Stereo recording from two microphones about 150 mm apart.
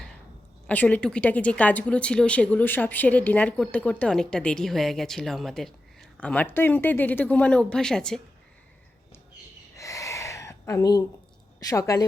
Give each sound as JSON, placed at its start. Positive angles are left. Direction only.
{"t": 0.7, "sound": "a woman's voice", "side_deg": 10}
{"t": 9.7, "sound": "gasp", "side_deg": 20}
{"t": 11.6, "sound": "a woman's voice", "side_deg": 20}